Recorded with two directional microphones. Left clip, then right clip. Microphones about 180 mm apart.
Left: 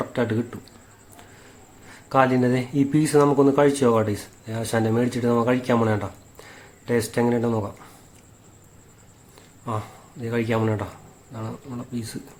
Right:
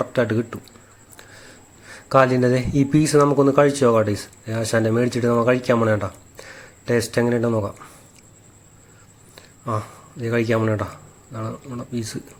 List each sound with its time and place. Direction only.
0.0 s speech: 20° right (ahead or behind)
2.0 s speech: 20° right (ahead or behind)
9.6 s speech: 20° right (ahead or behind)